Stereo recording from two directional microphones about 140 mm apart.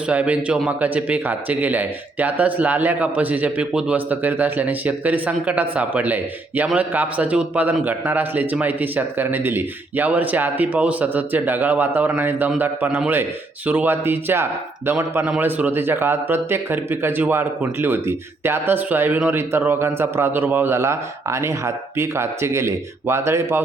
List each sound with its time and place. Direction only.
0.1 s a man's voice: 10° right (ahead or behind)